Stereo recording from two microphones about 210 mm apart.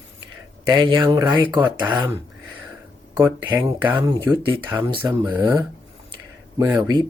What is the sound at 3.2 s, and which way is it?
Speech, 15° right (ahead or behind).